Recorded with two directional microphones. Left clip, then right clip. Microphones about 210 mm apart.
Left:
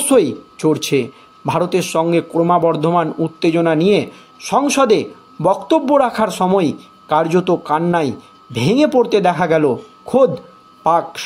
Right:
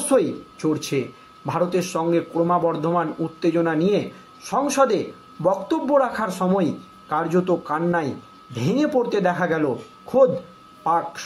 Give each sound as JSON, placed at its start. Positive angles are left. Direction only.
{"t": 0.1, "sound": "speech", "side_deg": 50}
{"t": 10.8, "sound": "speech", "side_deg": 50}